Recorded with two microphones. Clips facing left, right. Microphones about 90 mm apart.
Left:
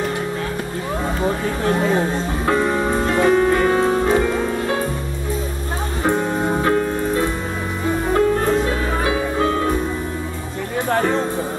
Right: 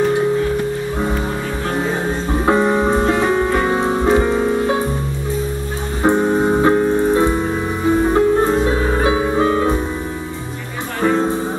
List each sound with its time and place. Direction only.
2.4 s music: 20° right (ahead or behind)
6.0 s music: 25° right (ahead or behind)